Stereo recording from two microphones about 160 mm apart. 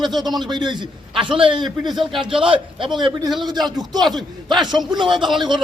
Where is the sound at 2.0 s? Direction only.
Centre (ahead or behind).